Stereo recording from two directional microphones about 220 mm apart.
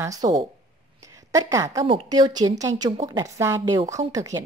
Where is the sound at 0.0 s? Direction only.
15° right (ahead or behind).